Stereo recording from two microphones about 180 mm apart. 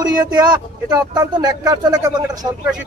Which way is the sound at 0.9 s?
20° right (ahead or behind).